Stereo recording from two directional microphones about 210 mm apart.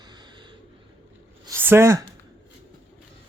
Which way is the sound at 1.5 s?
10° right (ahead or behind).